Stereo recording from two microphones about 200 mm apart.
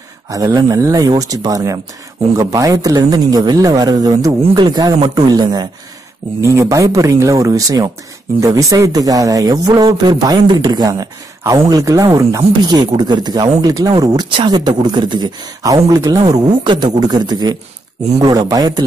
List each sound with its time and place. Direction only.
0.3 s speech: 20° right (ahead or behind)